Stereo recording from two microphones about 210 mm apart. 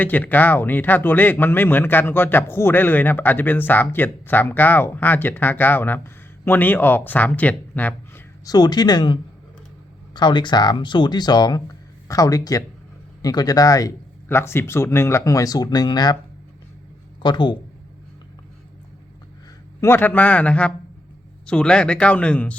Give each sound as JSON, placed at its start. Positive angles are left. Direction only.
{"t": 0.0, "sound": "speech", "side_deg": 10}
{"t": 10.2, "sound": "speech", "side_deg": 20}
{"t": 17.2, "sound": "speech", "side_deg": 20}
{"t": 19.8, "sound": "speech", "side_deg": 10}